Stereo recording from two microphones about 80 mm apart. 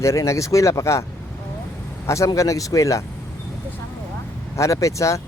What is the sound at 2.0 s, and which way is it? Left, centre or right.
Speech, left.